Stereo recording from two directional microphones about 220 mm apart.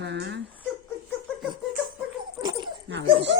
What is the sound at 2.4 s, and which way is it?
Dog, 20° right (ahead or behind).